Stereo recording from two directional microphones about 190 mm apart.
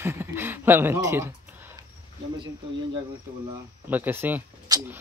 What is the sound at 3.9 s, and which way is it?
Speech, 10° right (ahead or behind).